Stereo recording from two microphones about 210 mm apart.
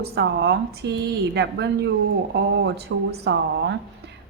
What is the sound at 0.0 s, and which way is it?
A woman's voice, 50° right (ahead or behind).